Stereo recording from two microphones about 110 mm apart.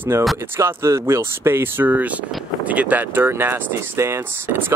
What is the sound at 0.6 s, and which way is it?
Speech, 25° right (ahead or behind).